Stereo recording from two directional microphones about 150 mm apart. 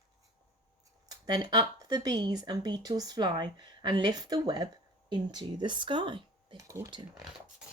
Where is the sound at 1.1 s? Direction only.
25° right (ahead or behind).